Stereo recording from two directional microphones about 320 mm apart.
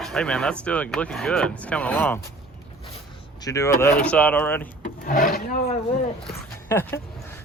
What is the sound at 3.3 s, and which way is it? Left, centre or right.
Speech, centre.